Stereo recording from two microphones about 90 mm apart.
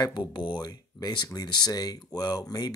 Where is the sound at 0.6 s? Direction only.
45° left (ahead or behind).